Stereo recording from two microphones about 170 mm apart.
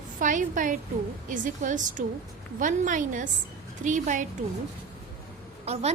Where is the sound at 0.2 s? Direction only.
50° right (ahead or behind).